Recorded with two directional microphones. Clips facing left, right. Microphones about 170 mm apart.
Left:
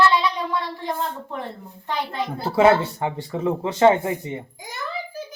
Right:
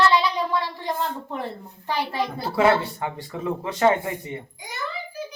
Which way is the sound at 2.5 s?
25° left (ahead or behind).